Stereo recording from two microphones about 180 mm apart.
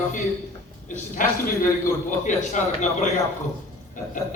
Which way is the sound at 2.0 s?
45° left (ahead or behind).